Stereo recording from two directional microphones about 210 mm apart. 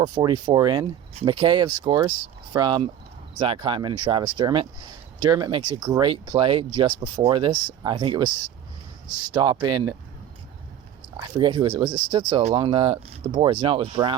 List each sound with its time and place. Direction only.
0.0 s speech: 20° right (ahead or behind)
11.2 s speech: 20° right (ahead or behind)